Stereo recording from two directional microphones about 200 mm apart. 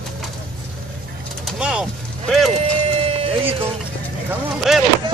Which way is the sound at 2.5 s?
30° right (ahead or behind).